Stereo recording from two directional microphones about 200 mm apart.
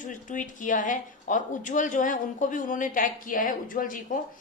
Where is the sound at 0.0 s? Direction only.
40° left (ahead or behind).